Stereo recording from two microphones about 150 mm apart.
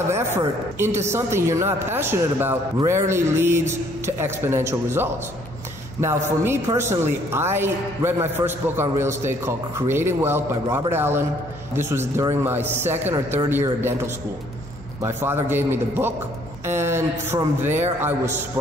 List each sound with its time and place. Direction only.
0.1 s a woman's voice: 15° right (ahead or behind)